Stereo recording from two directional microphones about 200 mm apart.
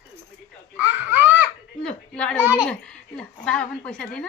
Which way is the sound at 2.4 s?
10° right (ahead or behind).